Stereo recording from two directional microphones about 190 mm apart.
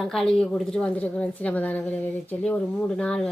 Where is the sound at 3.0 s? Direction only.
5° left (ahead or behind).